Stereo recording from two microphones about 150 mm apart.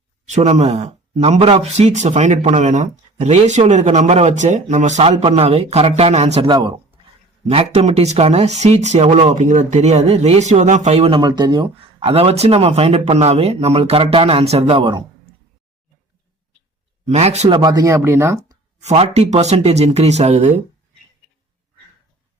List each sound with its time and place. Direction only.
0.3 s speech: 50° right (ahead or behind)
6.5 s speech: 30° right (ahead or behind)
7.4 s speech: 45° right (ahead or behind)
9.3 s speech: 55° right (ahead or behind)
11.2 s speech: 30° right (ahead or behind)
17.1 s speech: 45° right (ahead or behind)
17.5 s speech: 30° right (ahead or behind)
18.8 s speech: 45° right (ahead or behind)